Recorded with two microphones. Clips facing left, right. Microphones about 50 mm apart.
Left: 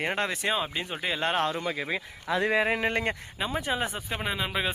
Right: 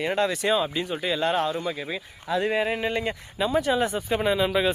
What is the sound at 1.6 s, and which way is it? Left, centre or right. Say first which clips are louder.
Speech: even; left.